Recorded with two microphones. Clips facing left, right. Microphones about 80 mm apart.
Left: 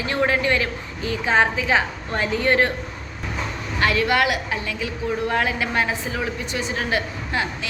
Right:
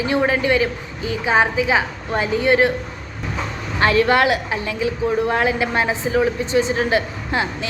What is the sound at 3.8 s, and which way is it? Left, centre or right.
A woman's voice, right.